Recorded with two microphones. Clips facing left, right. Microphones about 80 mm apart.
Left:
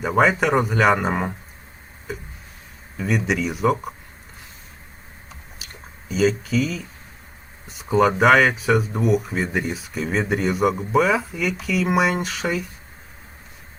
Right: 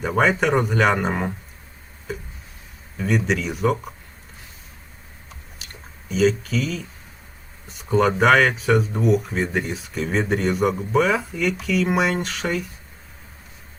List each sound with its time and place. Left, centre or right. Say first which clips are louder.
0.0 s speech: left 1 dB; centre
3.0 s speech: even; centre
6.1 s speech: right 1 dB; centre